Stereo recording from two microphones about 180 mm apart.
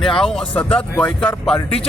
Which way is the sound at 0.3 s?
5° left (ahead or behind).